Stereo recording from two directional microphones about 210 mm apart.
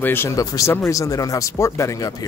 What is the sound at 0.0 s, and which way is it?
Speech, 10° left (ahead or behind).